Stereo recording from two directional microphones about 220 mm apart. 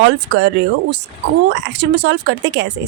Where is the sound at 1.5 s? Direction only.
55° right (ahead or behind).